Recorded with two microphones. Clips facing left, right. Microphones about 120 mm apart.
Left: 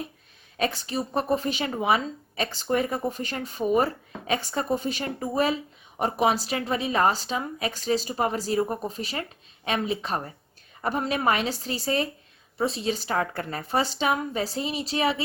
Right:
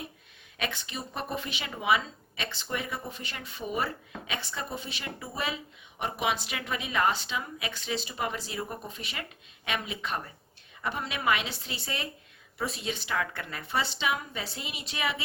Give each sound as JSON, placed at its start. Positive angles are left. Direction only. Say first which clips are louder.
{"t": 0.5, "sound": "speech", "louder": "left 8 dB", "side_deg": 35}